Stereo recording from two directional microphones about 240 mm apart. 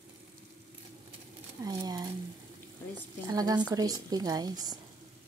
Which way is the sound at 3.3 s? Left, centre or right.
Centre.